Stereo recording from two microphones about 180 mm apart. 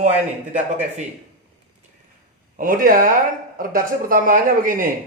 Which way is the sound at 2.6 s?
50° right (ahead or behind).